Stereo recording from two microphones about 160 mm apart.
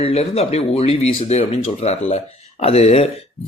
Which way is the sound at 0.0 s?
40° left (ahead or behind).